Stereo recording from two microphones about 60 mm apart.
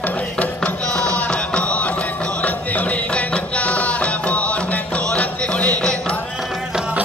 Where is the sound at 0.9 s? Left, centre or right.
Centre.